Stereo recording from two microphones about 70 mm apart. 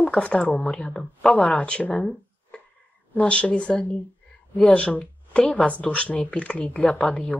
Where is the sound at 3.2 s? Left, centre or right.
Centre.